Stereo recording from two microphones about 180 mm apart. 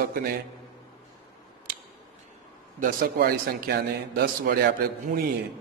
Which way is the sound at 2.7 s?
50° right (ahead or behind).